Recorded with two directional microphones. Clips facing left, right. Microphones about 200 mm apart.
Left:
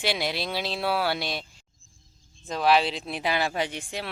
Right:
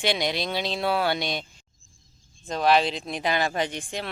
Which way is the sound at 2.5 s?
5° left (ahead or behind).